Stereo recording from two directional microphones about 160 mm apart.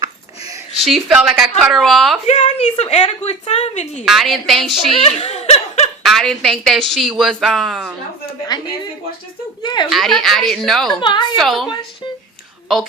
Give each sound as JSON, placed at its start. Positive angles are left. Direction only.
{"t": 0.8, "sound": "speech", "side_deg": 0}
{"t": 2.2, "sound": "a woman's voice", "side_deg": 45}
{"t": 4.0, "sound": "speech", "side_deg": 0}
{"t": 4.9, "sound": "speech", "side_deg": 40}
{"t": 6.0, "sound": "speech", "side_deg": 0}
{"t": 8.5, "sound": "a woman's voice", "side_deg": 25}
{"t": 9.9, "sound": "speech", "side_deg": 0}
{"t": 11.0, "sound": "a woman's voice", "side_deg": 30}
{"t": 11.3, "sound": "speech", "side_deg": 0}